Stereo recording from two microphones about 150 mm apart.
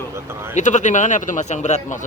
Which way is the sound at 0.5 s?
55° left (ahead or behind).